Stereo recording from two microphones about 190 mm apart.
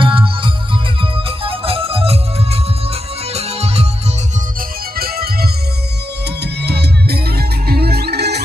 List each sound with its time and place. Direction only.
0.0 s music: 25° right (ahead or behind)
4.9 s music: 50° right (ahead or behind)